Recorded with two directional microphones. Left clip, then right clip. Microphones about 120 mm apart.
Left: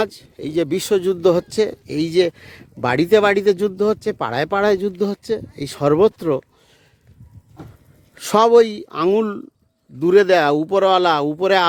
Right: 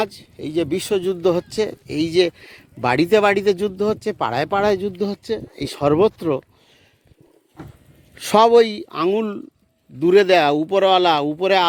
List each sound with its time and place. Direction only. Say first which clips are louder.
0.0 s speech: left 2 dB; 50° left (ahead or behind)
2.8 s speech: left 1 dB; 35° left (ahead or behind)
3.9 s speech: even; 35° left (ahead or behind)
8.1 s speech: even; 30° left (ahead or behind); by 11.7 s 45° left (ahead or behind)